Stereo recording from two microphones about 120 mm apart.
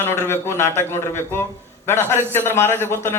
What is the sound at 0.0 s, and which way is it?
A man's voice, 20° left (ahead or behind).